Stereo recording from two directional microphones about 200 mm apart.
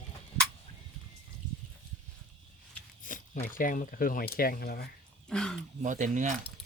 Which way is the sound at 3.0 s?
40° left (ahead or behind).